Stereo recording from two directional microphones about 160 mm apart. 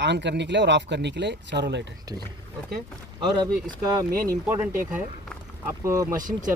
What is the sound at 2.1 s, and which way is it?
Speech, 20° right (ahead or behind).